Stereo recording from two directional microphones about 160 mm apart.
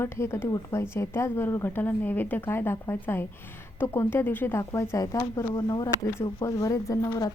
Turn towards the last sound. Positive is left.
turn(degrees=20)  # may be behind; listen again after turning